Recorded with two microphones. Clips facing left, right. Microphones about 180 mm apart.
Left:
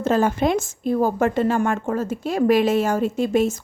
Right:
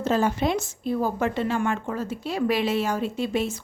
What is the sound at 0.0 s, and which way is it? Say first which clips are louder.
A woman's voice: left 4 dB; 50° left (ahead or behind).